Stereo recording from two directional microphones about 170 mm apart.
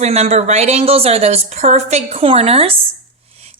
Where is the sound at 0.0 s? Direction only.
40° right (ahead or behind).